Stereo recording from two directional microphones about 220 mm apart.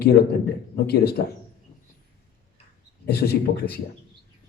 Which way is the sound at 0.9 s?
45° left (ahead or behind).